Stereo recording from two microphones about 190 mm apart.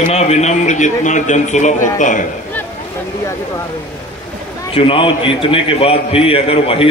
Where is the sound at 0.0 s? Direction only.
35° left (ahead or behind).